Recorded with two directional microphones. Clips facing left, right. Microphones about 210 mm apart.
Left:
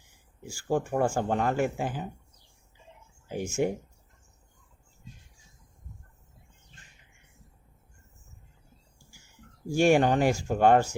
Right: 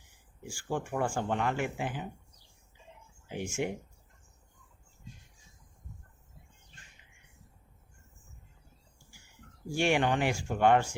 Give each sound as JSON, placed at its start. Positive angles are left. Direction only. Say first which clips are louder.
{"t": 0.4, "sound": "speech", "louder": "left 6 dB", "side_deg": 40}
{"t": 3.2, "sound": "speech", "louder": "left 6 dB", "side_deg": 40}
{"t": 9.7, "sound": "speech", "louder": "left 6 dB", "side_deg": 40}